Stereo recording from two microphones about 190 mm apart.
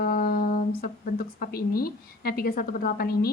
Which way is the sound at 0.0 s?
50° left (ahead or behind).